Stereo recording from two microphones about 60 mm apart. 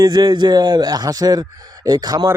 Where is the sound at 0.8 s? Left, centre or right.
Right.